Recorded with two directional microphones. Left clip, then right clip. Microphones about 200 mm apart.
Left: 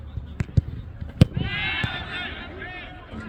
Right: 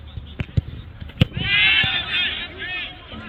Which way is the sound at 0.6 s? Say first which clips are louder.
Even; 20° left (ahead or behind).